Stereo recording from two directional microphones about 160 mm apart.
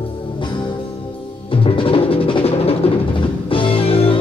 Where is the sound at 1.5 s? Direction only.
35° left (ahead or behind).